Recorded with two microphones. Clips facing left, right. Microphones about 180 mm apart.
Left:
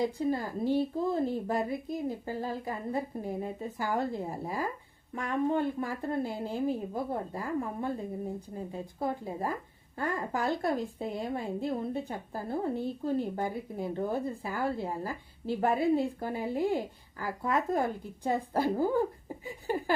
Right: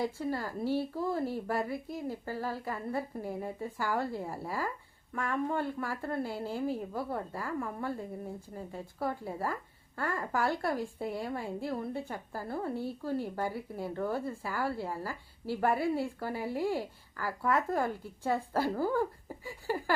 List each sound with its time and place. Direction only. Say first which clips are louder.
0.0 s a woman's voice: left 4 dB; 20° left (ahead or behind)